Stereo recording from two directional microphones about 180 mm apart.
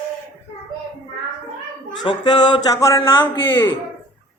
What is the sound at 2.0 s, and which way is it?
Speech, 25° left (ahead or behind).